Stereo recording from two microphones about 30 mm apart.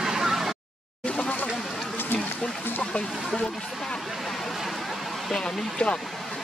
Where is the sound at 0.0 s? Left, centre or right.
Centre.